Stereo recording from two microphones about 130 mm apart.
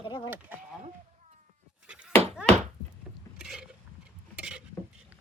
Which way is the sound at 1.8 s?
10° right (ahead or behind).